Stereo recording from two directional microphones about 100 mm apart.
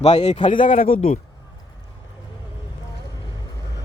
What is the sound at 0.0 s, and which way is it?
Speech, 90° left.